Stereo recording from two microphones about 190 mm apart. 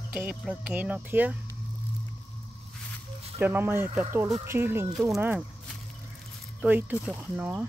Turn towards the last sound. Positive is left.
turn(degrees=-5)  # may be behind; listen again after turning